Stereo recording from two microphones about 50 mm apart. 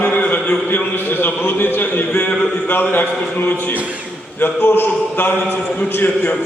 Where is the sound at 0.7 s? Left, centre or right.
Left.